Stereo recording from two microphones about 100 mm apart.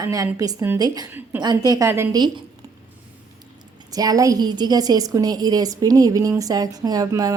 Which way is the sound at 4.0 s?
35° right (ahead or behind).